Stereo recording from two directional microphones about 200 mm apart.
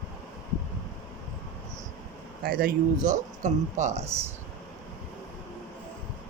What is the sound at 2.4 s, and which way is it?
Speech, 45° right (ahead or behind).